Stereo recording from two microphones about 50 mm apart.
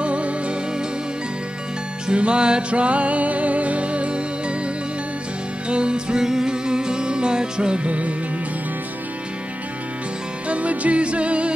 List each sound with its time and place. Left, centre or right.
0.0 s music: right
2.0 s music: centre
5.7 s music: centre
10.5 s music: right